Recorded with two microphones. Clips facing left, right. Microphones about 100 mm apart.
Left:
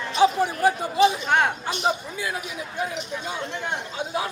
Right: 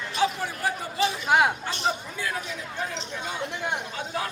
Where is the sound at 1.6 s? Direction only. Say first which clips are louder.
Left 3 dB; 15° left (ahead or behind).